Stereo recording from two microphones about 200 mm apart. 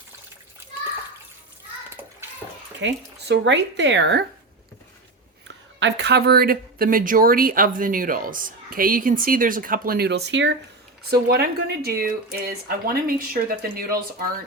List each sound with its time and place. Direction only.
2.8 s speech: 65° right (ahead or behind)
5.5 s speech: 60° right (ahead or behind)